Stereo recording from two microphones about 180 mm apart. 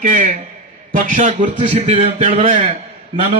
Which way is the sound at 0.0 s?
45° right (ahead or behind).